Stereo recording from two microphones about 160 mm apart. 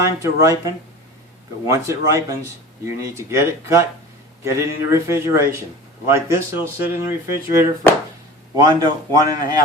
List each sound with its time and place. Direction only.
0.2 s a man's voice: 20° right (ahead or behind)